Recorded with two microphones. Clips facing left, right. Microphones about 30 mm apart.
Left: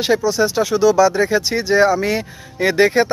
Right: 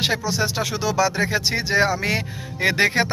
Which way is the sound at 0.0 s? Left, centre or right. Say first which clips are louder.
Left 6 dB; right.